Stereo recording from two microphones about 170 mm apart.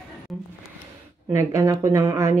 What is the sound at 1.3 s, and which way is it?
Speech, 15° right (ahead or behind).